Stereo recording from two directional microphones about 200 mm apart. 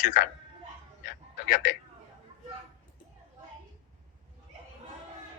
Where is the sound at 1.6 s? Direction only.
45° left (ahead or behind).